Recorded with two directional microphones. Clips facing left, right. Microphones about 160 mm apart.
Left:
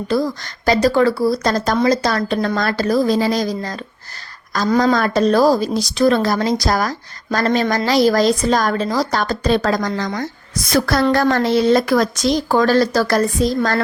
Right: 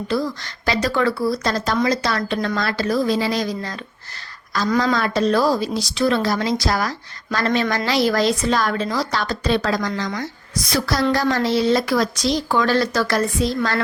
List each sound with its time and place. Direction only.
0.1 s a woman's voice: 40° left (ahead or behind)
4.7 s a woman's voice: 40° left (ahead or behind)